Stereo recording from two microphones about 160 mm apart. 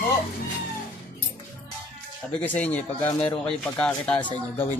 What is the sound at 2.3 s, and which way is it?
Speech, 10° left (ahead or behind).